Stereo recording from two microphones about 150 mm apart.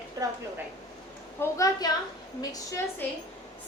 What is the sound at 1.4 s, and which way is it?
A woman's voice, 20° left (ahead or behind).